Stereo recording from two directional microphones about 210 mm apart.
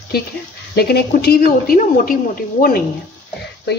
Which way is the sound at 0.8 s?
50° left (ahead or behind).